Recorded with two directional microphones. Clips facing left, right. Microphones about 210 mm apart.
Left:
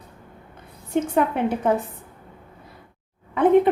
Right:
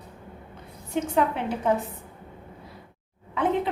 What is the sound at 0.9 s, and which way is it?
Speech, 55° left (ahead or behind).